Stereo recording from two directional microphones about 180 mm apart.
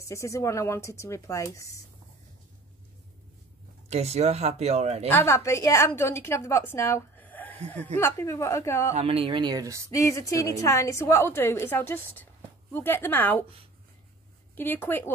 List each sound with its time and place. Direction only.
0.0 s a woman's voice: 15° left (ahead or behind)
3.9 s speech: 35° right (ahead or behind)
5.1 s a woman's voice: 15° left (ahead or behind)
8.9 s speech: 30° right (ahead or behind)
9.8 s a woman's voice: 15° left (ahead or behind)
14.6 s a woman's voice: 10° left (ahead or behind)